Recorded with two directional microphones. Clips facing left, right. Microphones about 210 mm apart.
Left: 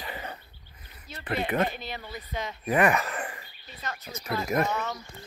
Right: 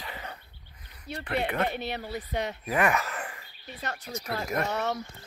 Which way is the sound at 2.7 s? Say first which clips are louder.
Left 4 dB; centre (ahead or behind).